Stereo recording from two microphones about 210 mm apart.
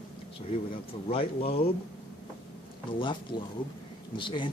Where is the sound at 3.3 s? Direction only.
50° left (ahead or behind).